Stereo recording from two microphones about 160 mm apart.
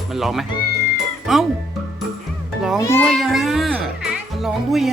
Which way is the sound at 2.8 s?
15° left (ahead or behind).